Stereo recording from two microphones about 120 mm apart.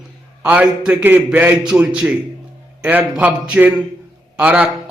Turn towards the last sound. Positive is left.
turn(degrees=-10)  # may be behind; listen again after turning